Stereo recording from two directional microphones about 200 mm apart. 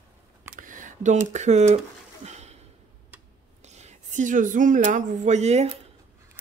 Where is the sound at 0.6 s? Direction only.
40° right (ahead or behind).